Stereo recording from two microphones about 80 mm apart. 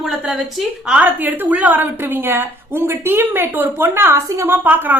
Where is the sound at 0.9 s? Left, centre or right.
Right.